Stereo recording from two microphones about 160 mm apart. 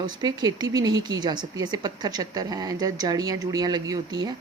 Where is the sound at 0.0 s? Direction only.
25° right (ahead or behind).